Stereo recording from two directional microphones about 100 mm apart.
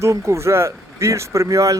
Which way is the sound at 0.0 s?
30° right (ahead or behind).